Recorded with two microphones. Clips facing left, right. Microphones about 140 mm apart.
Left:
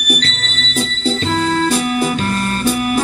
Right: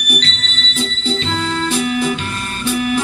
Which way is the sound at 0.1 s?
40° left (ahead or behind).